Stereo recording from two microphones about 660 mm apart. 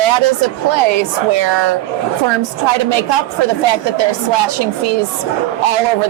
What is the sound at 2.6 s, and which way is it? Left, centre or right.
A woman's voice, right.